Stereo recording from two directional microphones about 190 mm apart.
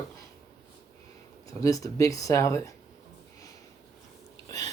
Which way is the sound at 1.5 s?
15° left (ahead or behind).